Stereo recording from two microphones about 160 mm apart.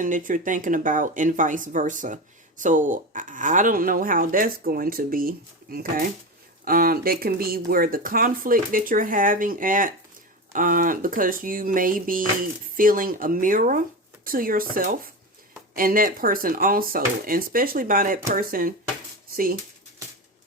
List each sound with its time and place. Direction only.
0.0 s speech: 55° right (ahead or behind)